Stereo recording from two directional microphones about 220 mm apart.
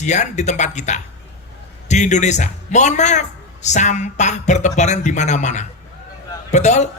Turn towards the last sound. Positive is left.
turn(degrees=30)  # may be behind; listen again after turning